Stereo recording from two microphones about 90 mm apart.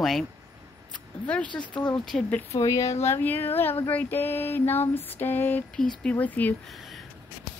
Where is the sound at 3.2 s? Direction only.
25° left (ahead or behind).